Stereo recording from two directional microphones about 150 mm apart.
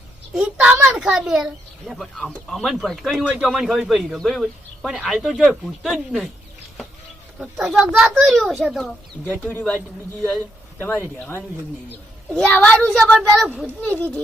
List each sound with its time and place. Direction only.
0.3 s a child's voice: 10° right (ahead or behind)
7.3 s a man's voice: 5° right (ahead or behind); by 11.4 s 15° left (ahead or behind)
12.3 s a man's voice: 5° left (ahead or behind)